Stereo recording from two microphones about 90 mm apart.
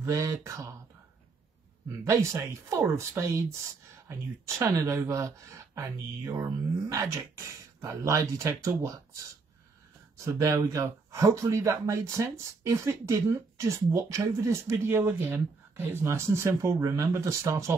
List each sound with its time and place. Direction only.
0.0 s speech: 35° right (ahead or behind)
1.9 s speech: 35° right (ahead or behind)